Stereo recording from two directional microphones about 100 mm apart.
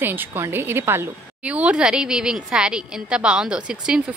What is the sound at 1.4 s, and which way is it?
Speech, 10° right (ahead or behind).